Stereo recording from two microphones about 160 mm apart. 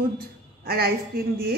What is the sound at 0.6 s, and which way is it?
Speech, 70° right (ahead or behind).